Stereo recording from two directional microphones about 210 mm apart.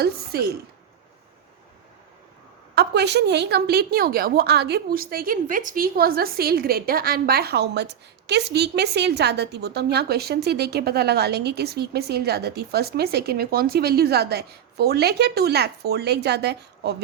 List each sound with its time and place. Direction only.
0.0 s a woman's voice: 50° right (ahead or behind)
2.7 s a woman's voice: 55° right (ahead or behind)